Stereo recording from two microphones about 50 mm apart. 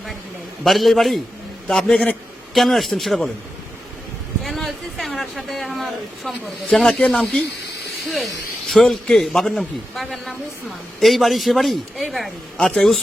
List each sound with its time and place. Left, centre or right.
0.6 s a man's voice: centre
4.4 s a sound: centre
5.4 s a man's voice: centre
7.2 s speech: left
7.6 s a sound: centre
8.7 s a man's voice: centre
12.5 s speech: centre